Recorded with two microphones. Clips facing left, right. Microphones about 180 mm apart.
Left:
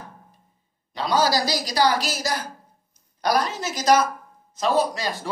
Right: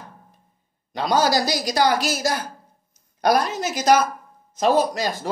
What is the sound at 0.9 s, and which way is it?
Speech, 50° right (ahead or behind).